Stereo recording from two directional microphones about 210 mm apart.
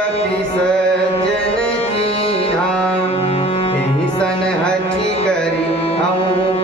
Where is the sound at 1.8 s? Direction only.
30° left (ahead or behind).